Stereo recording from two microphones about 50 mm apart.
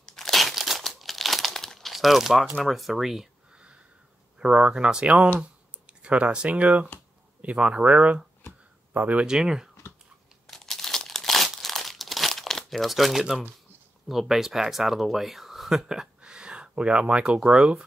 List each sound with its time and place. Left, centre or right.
0.0 s crumpling: centre
2.6 s speech: centre
3.5 s sniff: right
4.4 s speech: right
9.2 s speech: centre
10.4 s crumpling: centre
14.0 s speech: centre